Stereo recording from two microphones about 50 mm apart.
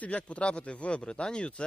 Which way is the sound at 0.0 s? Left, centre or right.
Left.